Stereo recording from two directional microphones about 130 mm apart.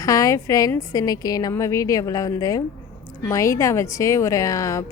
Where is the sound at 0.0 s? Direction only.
25° left (ahead or behind).